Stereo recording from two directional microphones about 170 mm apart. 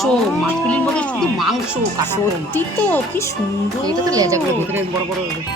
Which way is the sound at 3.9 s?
20° right (ahead or behind).